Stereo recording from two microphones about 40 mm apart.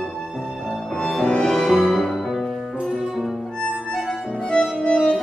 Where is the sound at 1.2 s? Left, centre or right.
Left.